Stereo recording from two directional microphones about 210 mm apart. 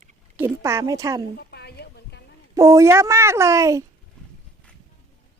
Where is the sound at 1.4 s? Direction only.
50° left (ahead or behind).